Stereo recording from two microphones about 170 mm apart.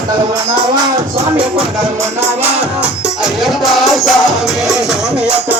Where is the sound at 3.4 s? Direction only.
Centre (ahead or behind).